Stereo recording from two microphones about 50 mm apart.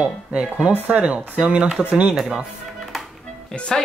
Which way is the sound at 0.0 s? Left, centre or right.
Centre.